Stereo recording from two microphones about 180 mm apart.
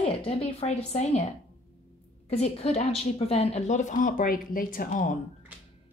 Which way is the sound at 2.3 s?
35° left (ahead or behind).